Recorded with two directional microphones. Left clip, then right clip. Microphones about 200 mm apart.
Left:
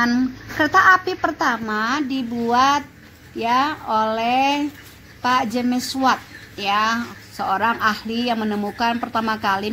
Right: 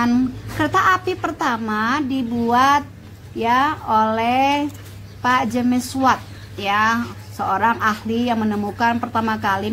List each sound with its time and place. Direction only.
0.0 s a woman's voice: 25° left (ahead or behind)